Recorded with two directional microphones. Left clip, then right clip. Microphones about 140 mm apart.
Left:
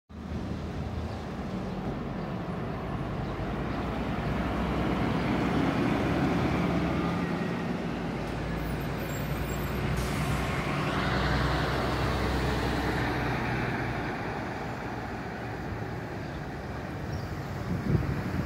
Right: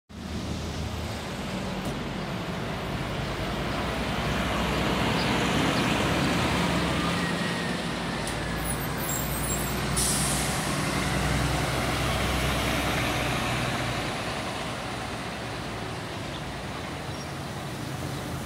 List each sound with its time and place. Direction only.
5.3 s vehicle: 30° right (ahead or behind)